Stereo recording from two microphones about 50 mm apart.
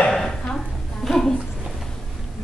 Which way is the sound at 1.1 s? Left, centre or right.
Centre.